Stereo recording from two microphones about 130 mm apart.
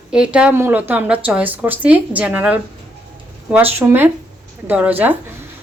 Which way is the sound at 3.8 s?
15° right (ahead or behind).